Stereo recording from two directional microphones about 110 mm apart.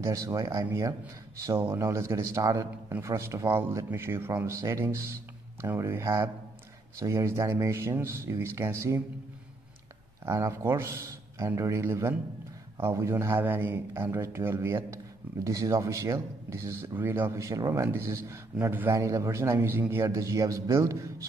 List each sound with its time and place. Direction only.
0.0 s speech: 30° right (ahead or behind)
10.2 s speech: 25° right (ahead or behind)